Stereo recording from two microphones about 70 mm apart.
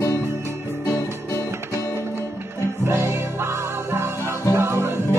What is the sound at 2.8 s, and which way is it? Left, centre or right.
Music, right.